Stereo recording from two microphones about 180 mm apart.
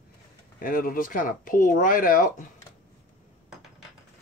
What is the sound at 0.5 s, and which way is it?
Speech, 50° left (ahead or behind).